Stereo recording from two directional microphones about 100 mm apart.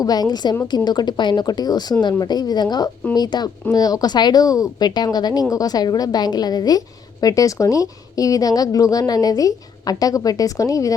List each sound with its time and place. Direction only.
0.0 s a woman's voice: 40° left (ahead or behind)